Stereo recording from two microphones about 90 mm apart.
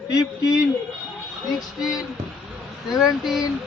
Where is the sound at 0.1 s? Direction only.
45° left (ahead or behind).